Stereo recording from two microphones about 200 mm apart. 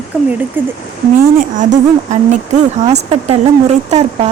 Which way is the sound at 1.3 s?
40° right (ahead or behind).